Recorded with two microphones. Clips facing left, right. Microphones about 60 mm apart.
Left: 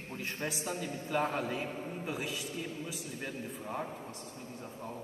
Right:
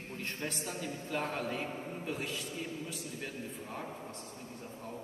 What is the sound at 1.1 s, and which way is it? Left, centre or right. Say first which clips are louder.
A man's voice: left 4 dB; centre.